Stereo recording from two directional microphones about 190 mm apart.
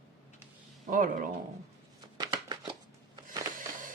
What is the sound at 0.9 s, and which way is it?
Speech, 45° right (ahead or behind).